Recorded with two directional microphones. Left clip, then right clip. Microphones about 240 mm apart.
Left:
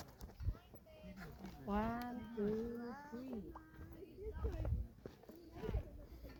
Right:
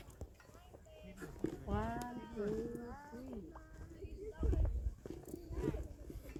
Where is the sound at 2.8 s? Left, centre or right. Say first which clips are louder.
Left 1 dB; left.